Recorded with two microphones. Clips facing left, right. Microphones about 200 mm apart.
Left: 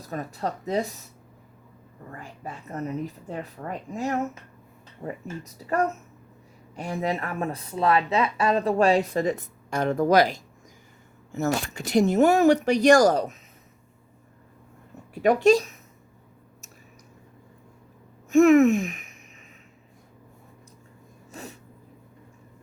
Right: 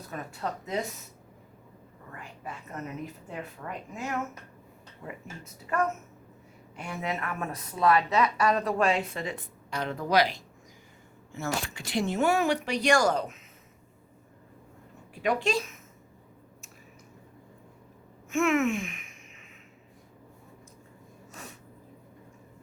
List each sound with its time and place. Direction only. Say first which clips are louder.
0.1 s speech: left 5 dB; 35° left (ahead or behind)
2.1 s speech: left 3 dB; 35° left (ahead or behind)
15.1 s a woman's voice: left 9 dB; 45° left (ahead or behind)
18.3 s a sound: left 10 dB; 35° left (ahead or behind)